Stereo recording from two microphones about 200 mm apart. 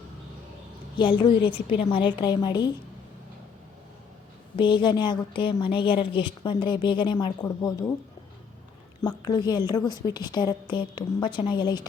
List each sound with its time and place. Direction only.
0.9 s a woman's voice: 25° left (ahead or behind)
4.5 s a woman's voice: 25° left (ahead or behind)
9.0 s a woman's voice: 20° left (ahead or behind)